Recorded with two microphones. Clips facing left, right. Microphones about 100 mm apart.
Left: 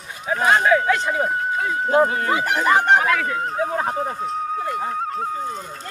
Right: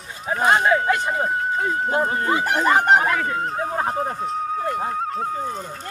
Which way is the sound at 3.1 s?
Centre (ahead or behind).